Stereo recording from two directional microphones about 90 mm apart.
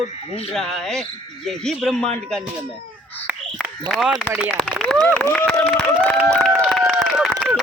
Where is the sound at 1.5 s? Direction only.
5° left (ahead or behind).